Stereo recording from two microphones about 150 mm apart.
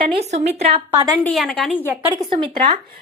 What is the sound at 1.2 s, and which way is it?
Speech, 5° left (ahead or behind).